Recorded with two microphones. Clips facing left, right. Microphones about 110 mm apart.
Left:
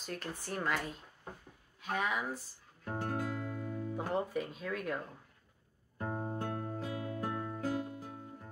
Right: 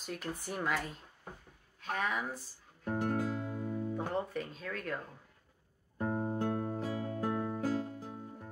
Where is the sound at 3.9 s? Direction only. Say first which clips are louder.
Left 4 dB; 5° left (ahead or behind).